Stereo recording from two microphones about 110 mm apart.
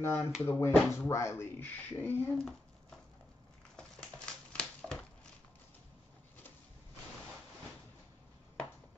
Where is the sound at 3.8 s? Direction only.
10° left (ahead or behind).